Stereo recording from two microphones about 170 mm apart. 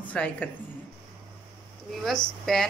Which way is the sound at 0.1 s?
10° left (ahead or behind).